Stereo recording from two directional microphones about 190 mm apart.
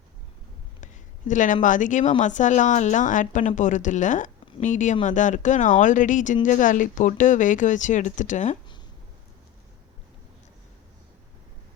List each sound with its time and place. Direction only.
1.3 s a woman's voice: 40° left (ahead or behind)